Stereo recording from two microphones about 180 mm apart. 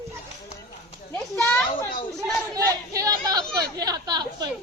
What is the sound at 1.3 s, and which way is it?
Children playing, 10° left (ahead or behind).